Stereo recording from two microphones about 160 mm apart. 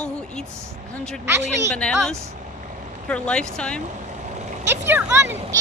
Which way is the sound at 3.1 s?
5° left (ahead or behind).